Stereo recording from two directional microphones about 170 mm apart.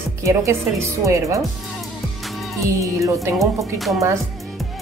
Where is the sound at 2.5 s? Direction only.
20° right (ahead or behind).